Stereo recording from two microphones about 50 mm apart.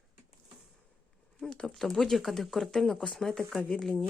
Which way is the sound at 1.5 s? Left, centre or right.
Centre.